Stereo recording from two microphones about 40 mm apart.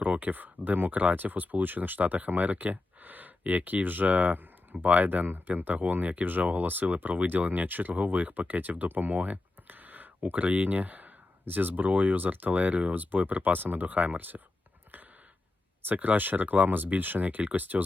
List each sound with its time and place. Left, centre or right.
0.0 s speech: right
8.9 s a sound: right
10.2 s speech: right
15.9 s speech: right